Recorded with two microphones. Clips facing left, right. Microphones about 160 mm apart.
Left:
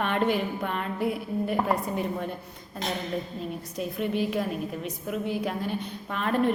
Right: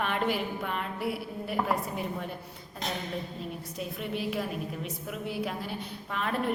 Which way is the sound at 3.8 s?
Centre (ahead or behind).